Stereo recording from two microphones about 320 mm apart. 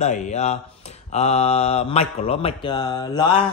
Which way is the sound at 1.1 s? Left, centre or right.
Centre.